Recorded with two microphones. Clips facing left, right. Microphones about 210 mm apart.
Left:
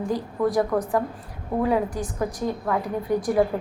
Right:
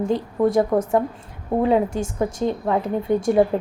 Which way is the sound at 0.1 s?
25° right (ahead or behind).